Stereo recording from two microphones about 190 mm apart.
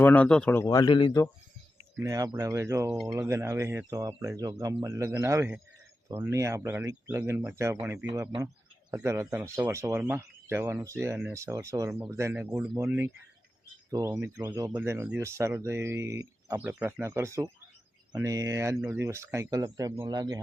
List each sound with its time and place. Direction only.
0.0 s speech: 10° left (ahead or behind); by 1.2 s 25° left (ahead or behind)
2.0 s speech: 20° right (ahead or behind)